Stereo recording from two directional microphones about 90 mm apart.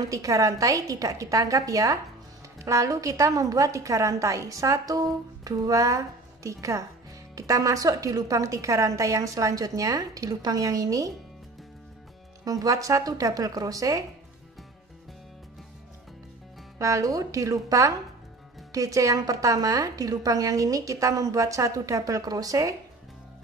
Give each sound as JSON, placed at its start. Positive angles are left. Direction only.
{"t": 0.0, "sound": "a woman's voice", "side_deg": -40}
{"t": 12.4, "sound": "a woman's voice", "side_deg": -40}
{"t": 16.7, "sound": "a woman's voice", "side_deg": -35}